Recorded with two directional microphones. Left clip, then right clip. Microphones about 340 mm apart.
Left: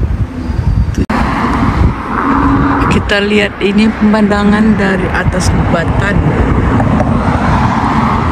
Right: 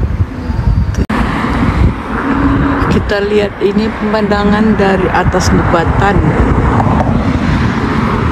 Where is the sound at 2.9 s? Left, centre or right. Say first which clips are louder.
Left 1 dB; centre.